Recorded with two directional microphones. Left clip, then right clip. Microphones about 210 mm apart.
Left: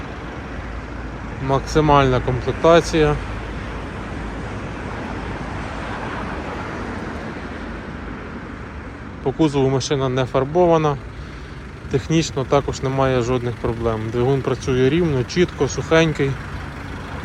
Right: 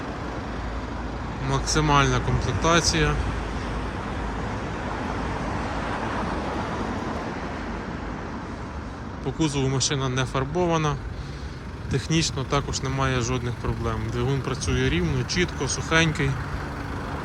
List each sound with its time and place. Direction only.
1.5 s speech: 5° right (ahead or behind)
5.1 s waves: 55° right (ahead or behind)
9.2 s speech: 5° right (ahead or behind)